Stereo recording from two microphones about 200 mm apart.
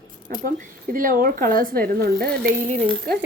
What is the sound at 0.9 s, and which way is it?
Speech, 45° right (ahead or behind).